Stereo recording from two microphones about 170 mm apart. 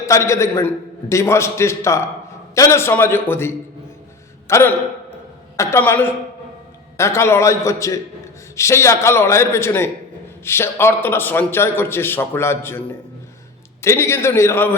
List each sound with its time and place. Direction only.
0.0 s a man's voice: 15° left (ahead or behind)
13.8 s a man's voice: 15° left (ahead or behind)